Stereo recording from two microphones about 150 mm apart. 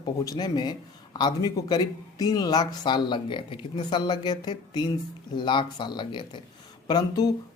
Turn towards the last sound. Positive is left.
turn(degrees=25)  # may be behind; listen again after turning